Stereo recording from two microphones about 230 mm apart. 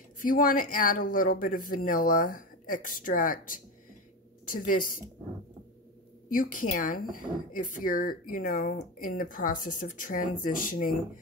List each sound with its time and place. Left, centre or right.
0.2 s speech: left
6.3 s speech: left